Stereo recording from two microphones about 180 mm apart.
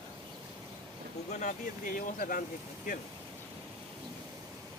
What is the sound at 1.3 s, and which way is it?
Speech, 45° left (ahead or behind).